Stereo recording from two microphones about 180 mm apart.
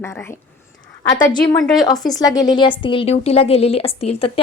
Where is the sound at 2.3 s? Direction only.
20° left (ahead or behind).